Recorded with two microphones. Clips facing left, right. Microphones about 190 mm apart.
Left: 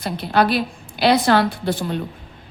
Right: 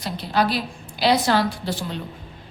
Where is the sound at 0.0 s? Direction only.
60° left (ahead or behind).